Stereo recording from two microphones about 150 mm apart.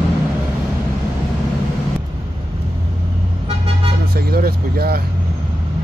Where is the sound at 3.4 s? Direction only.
40° right (ahead or behind).